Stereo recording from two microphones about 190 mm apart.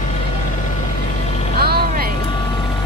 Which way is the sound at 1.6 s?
55° right (ahead or behind).